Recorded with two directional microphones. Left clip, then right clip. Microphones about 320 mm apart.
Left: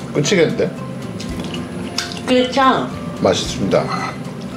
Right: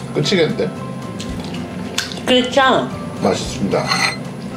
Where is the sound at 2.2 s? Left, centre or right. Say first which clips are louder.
Right 1 dB; right.